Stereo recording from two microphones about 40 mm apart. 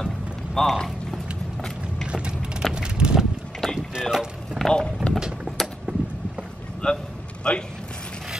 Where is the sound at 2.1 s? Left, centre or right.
Right.